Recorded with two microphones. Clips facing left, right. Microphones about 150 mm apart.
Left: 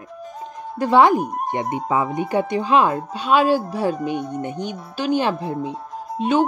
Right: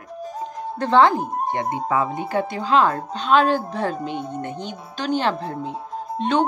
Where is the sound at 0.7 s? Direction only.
10° left (ahead or behind).